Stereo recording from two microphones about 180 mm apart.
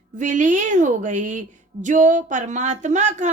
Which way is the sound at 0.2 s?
45° right (ahead or behind).